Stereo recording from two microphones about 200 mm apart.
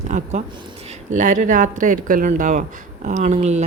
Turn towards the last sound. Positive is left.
turn(degrees=-35)  # may be behind; listen again after turning